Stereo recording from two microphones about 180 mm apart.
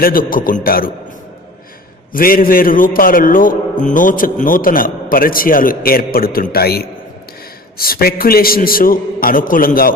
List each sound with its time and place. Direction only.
0.0 s a man's voice: 50° left (ahead or behind)
2.1 s a man's voice: 55° left (ahead or behind)